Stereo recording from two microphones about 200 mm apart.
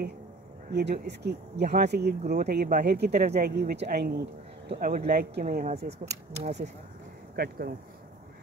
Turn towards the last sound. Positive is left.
turn(degrees=-45)  # may be behind; listen again after turning